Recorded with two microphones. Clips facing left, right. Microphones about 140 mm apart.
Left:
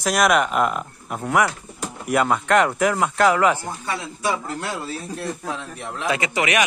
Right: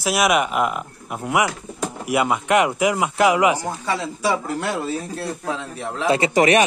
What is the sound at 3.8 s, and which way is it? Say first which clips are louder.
Speech: right 3 dB; 75° right (ahead or behind).